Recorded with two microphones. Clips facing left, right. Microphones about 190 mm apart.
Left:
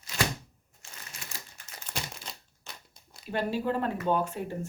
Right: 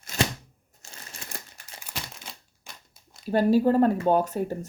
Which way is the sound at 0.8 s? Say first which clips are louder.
Right 2 dB; 40° right (ahead or behind).